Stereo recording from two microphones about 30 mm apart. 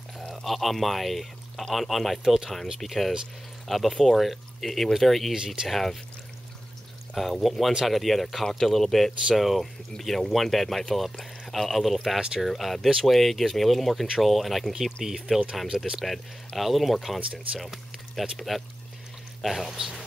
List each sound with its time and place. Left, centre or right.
0.4 s speech: centre
2.2 s speech: centre
2.5 s speech: centre
2.9 s speech: centre
3.9 s speech: centre
4.2 s speech: centre
7.2 s speech: centre
15.0 s speech: centre
16.5 s speech: centre
19.4 s speech: centre